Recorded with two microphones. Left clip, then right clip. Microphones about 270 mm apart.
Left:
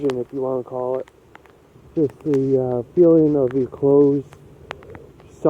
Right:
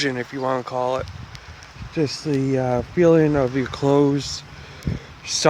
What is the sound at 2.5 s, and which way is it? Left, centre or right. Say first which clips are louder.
Speech: left 2 dB; right.